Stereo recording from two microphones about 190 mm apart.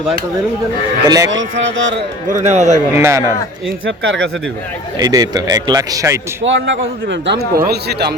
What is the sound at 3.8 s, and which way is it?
Speech, 90° right.